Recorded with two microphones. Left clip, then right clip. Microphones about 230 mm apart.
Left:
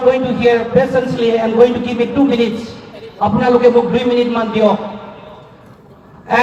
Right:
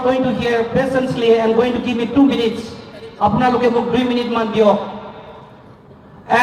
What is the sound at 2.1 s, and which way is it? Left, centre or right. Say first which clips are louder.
A man's voice: right 1 dB; right.